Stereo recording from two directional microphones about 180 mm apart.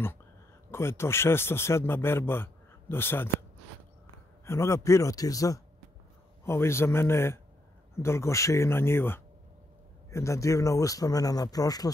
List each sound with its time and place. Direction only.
0.7 s speech: 15° left (ahead or behind)
4.5 s speech: 15° left (ahead or behind)